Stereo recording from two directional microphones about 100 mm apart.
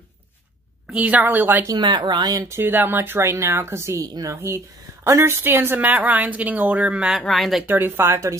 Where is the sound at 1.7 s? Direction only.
50° right (ahead or behind).